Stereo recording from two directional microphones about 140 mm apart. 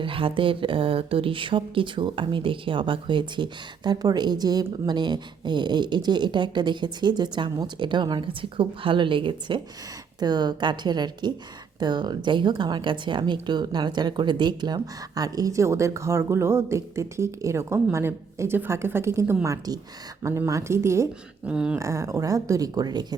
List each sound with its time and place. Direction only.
0.0 s speech: 40° right (ahead or behind); by 21.1 s 20° right (ahead or behind)
21.4 s speech: 5° right (ahead or behind)
21.8 s speech: 20° right (ahead or behind)